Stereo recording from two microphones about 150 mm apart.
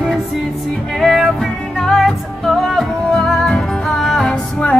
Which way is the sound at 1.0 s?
Centre (ahead or behind).